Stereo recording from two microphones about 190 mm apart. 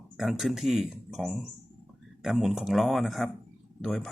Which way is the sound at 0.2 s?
Centre (ahead or behind).